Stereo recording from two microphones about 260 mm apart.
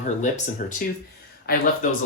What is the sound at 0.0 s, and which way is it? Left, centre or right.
Speech, left.